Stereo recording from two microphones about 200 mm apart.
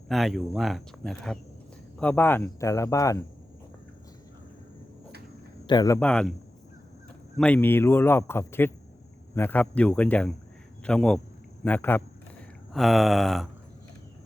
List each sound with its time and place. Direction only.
0.1 s speech: centre (ahead or behind); by 3.2 s 15° left (ahead or behind)
5.6 s speech: 20° left (ahead or behind)
6.0 s speech: 5° left (ahead or behind)
7.3 s speech: 5° left (ahead or behind)